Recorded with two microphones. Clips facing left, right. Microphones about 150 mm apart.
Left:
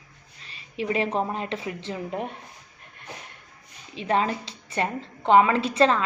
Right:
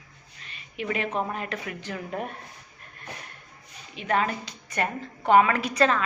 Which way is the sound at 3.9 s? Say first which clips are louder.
Left 2 dB; 30° left (ahead or behind).